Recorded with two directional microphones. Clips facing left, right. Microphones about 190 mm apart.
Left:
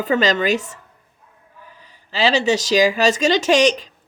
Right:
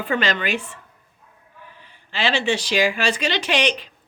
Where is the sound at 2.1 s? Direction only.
40° left (ahead or behind).